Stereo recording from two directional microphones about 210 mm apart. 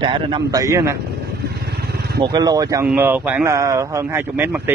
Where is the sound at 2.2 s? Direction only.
20° right (ahead or behind).